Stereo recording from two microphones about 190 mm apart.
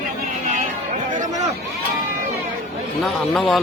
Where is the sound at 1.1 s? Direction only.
40° right (ahead or behind).